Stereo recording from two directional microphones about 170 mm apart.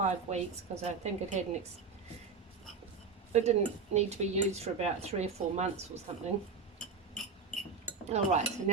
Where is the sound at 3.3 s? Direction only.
40° right (ahead or behind).